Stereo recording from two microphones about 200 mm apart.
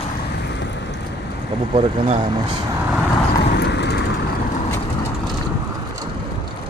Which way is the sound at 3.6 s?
60° left (ahead or behind).